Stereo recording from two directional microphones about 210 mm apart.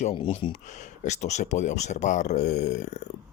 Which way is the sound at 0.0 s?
25° left (ahead or behind).